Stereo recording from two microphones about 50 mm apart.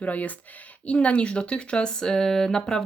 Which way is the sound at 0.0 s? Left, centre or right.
Left.